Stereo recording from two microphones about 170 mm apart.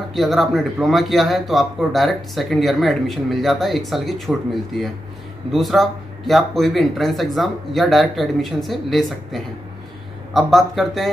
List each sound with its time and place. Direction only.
0.1 s speech: centre (ahead or behind)